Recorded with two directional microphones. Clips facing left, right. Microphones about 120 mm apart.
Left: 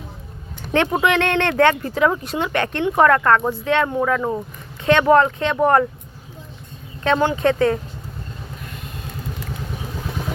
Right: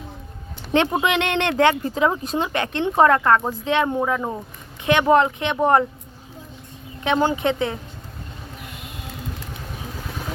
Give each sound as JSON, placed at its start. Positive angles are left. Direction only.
{"t": 0.9, "sound": "speech", "side_deg": -15}
{"t": 7.0, "sound": "speech", "side_deg": -15}